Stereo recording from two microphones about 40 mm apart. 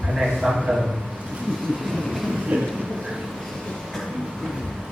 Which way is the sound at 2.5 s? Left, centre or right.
Right.